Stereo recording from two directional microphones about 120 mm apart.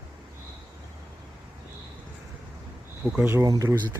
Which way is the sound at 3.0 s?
15° right (ahead or behind).